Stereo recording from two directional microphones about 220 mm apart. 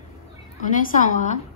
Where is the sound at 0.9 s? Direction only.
35° left (ahead or behind).